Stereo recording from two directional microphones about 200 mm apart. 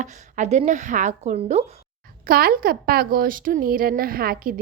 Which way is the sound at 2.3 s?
50° right (ahead or behind).